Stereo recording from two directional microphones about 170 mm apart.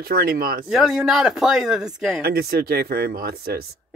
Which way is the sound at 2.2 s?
65° right (ahead or behind).